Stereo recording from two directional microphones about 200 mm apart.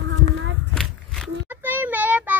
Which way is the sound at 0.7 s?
Centre (ahead or behind).